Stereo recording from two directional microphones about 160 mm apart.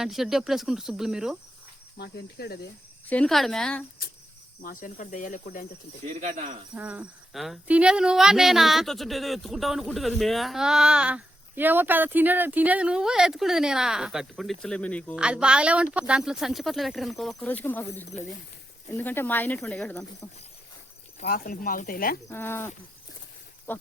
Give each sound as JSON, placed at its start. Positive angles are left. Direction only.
{"t": 0.0, "sound": "speech", "side_deg": 0}
{"t": 2.0, "sound": "cricket", "side_deg": 90}
{"t": 3.1, "sound": "speech", "side_deg": 5}
{"t": 4.6, "sound": "speech", "side_deg": 60}
{"t": 6.1, "sound": "speech", "side_deg": -50}
{"t": 6.7, "sound": "speech", "side_deg": -10}
{"t": 15.1, "sound": "speech", "side_deg": -5}
{"t": 17.4, "sound": "speech", "side_deg": 10}
{"t": 21.2, "sound": "speech", "side_deg": 70}
{"t": 22.3, "sound": "speech", "side_deg": 15}